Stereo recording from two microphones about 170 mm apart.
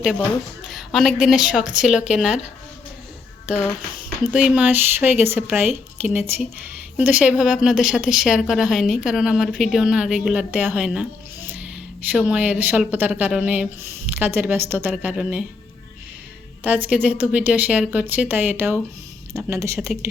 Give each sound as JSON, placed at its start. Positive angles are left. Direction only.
{"t": 0.0, "sound": "a woman's voice", "side_deg": -5}
{"t": 4.4, "sound": "a woman's voice", "side_deg": -10}
{"t": 16.6, "sound": "speech", "side_deg": -10}